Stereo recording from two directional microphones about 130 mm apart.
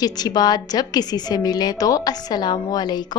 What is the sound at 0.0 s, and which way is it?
A woman's voice, 30° left (ahead or behind).